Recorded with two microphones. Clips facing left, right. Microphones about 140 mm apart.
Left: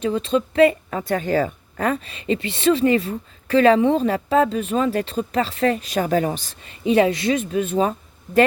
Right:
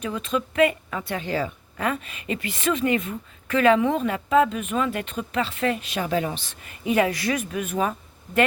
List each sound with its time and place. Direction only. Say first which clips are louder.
0.0 s a woman's voice: left 6 dB; 30° left (ahead or behind)
6.6 s speech: left 5 dB; 25° left (ahead or behind)